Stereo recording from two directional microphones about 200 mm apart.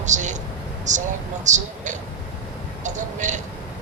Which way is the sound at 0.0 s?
35° right (ahead or behind).